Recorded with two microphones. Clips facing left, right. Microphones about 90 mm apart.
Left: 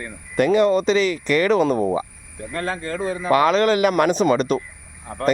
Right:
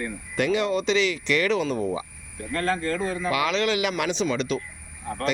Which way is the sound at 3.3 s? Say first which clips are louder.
Left 9 dB; 45° left (ahead or behind).